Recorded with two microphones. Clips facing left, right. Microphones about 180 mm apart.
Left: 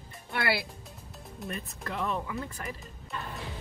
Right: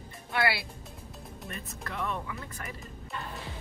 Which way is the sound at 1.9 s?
30° left (ahead or behind).